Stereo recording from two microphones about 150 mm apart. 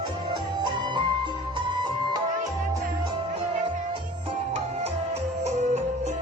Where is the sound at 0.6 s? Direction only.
30° right (ahead or behind).